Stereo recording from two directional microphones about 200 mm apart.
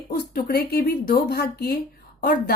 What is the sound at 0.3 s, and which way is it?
A woman's voice, 50° left (ahead or behind).